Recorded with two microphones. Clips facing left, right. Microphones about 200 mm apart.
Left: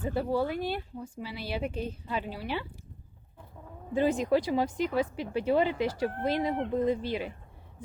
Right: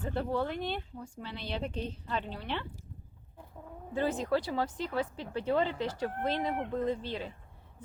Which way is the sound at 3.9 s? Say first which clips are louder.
Left 5 dB; 15° left (ahead or behind).